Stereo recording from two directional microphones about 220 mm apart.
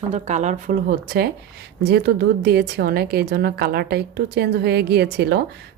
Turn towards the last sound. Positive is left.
turn(degrees=-50)  # may be behind; listen again after turning